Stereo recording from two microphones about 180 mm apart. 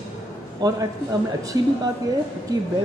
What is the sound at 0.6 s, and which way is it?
Speech, 20° right (ahead or behind).